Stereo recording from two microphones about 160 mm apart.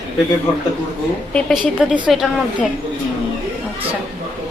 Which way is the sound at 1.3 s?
5° left (ahead or behind).